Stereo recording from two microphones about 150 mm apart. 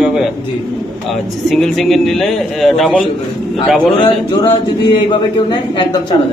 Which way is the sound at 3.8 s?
30° left (ahead or behind).